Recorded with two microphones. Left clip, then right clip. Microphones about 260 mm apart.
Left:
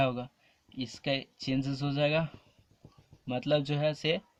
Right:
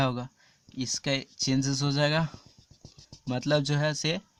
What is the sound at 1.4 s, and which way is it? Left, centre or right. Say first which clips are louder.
Speech: right 5 dB; right.